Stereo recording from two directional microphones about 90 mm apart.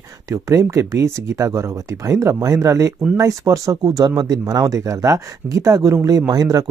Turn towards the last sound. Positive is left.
turn(degrees=-40)  # may be behind; listen again after turning